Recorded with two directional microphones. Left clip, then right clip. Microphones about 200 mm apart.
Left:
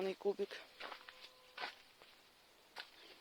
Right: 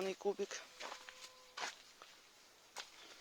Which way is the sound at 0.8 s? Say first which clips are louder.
Right 1 dB; 50° right (ahead or behind).